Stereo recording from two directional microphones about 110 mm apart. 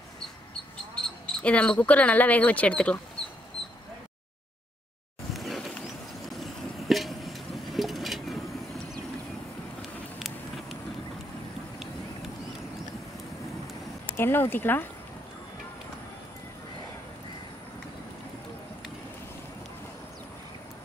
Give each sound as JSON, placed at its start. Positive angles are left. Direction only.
{"t": 1.2, "sound": "speech", "side_deg": 10}
{"t": 5.3, "sound": "a sound", "side_deg": 0}
{"t": 9.8, "sound": "vehicle", "side_deg": 0}
{"t": 14.1, "sound": "speech", "side_deg": 20}